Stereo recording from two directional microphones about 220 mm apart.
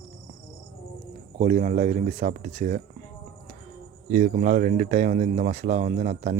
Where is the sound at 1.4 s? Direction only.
30° right (ahead or behind).